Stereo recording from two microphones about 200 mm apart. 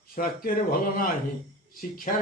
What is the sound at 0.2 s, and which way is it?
Speech, 45° left (ahead or behind).